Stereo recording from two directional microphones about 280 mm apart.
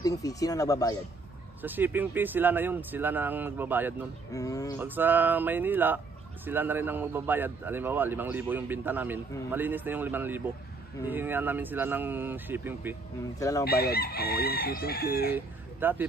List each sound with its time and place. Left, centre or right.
0.0 s speech: centre
1.6 s a man's voice: centre
4.3 s speech: centre
4.7 s a man's voice: centre
13.4 s speech: centre
13.7 s chicken: left
15.3 s speech: centre